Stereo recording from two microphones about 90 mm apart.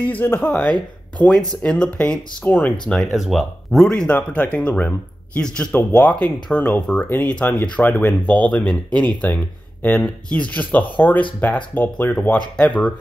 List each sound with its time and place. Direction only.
0.1 s speech: 20° left (ahead or behind)
0.4 s speech: 5° left (ahead or behind)
2.9 s speech: centre (ahead or behind)